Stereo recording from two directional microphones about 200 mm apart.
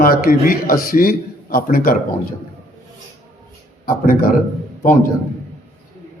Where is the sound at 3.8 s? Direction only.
45° left (ahead or behind).